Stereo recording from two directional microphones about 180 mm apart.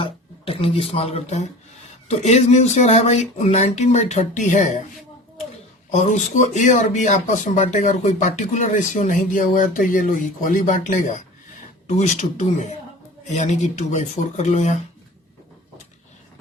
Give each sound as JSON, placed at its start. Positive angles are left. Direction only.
{"t": 0.0, "sound": "speech", "side_deg": 30}
{"t": 5.9, "sound": "speech", "side_deg": 40}